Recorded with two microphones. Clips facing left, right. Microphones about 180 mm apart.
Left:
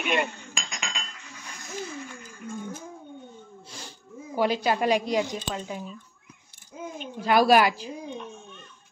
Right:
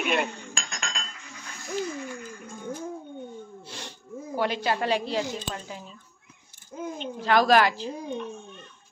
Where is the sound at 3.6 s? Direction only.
70° right (ahead or behind).